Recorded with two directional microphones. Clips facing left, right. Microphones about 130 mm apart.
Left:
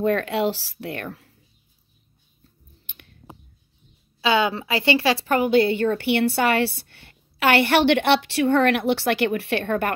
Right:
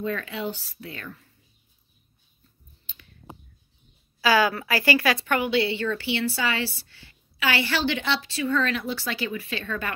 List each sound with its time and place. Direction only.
0.0 s speech: 70° left (ahead or behind)
2.9 s clicking: 65° left (ahead or behind)
4.2 s speech: 25° left (ahead or behind); by 9.9 s 60° left (ahead or behind)